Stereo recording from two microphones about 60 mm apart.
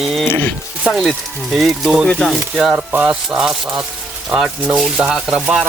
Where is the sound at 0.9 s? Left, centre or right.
Centre.